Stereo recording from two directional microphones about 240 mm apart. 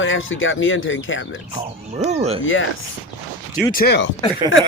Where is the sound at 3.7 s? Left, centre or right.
Left.